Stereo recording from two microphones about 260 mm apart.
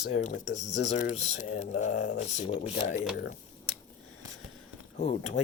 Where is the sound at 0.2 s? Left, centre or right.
Left.